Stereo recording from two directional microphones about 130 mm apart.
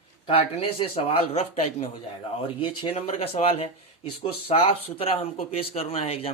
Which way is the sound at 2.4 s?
40° left (ahead or behind).